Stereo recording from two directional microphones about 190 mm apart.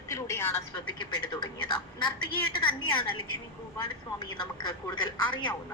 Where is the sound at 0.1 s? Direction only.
15° left (ahead or behind).